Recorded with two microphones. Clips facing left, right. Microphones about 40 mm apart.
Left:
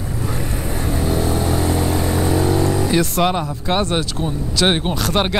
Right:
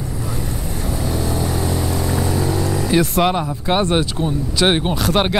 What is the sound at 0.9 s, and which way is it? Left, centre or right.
Vehicle, centre.